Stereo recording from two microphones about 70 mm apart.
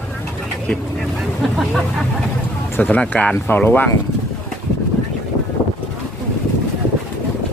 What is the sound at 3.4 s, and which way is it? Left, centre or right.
Speech, left.